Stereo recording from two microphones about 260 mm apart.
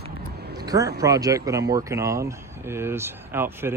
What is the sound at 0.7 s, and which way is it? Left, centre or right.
Speech, centre.